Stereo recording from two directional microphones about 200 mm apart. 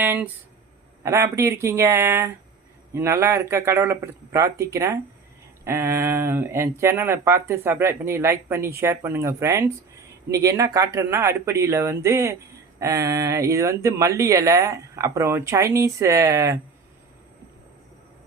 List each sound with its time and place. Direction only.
0.0 s speech: 10° right (ahead or behind)